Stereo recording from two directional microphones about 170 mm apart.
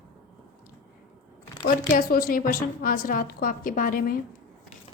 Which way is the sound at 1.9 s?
60° left (ahead or behind).